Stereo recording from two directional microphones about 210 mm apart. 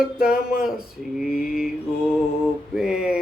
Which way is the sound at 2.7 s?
Centre (ahead or behind).